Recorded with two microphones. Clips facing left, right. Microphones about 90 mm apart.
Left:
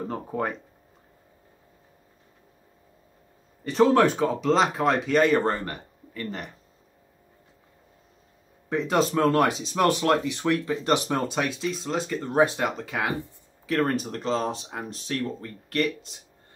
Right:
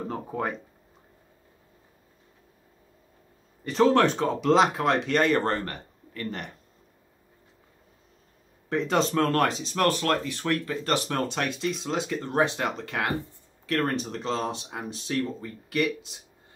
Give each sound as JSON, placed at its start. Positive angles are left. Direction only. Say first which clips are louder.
{"t": 0.0, "sound": "speech", "louder": "left 1 dB", "side_deg": 0}
{"t": 3.7, "sound": "speech", "louder": "left 1 dB", "side_deg": 5}
{"t": 8.6, "sound": "speech", "louder": "left 1 dB", "side_deg": 5}
{"t": 9.8, "sound": "speech", "louder": "left 3 dB", "side_deg": 15}